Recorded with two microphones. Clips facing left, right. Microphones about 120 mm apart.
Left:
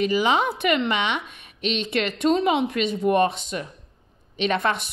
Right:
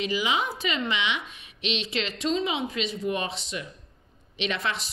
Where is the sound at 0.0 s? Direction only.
50° left (ahead or behind).